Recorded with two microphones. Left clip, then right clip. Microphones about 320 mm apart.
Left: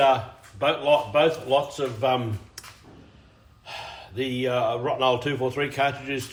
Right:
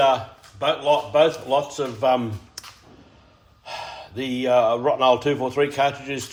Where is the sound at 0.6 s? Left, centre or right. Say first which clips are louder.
Right 1 dB; centre.